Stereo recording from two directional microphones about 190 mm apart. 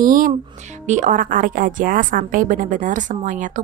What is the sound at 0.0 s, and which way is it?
A woman's voice, 45° right (ahead or behind).